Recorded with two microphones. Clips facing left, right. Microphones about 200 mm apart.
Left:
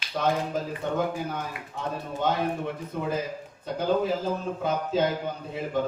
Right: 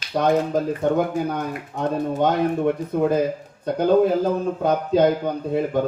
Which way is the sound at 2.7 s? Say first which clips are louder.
Right 10 dB; 55° right (ahead or behind).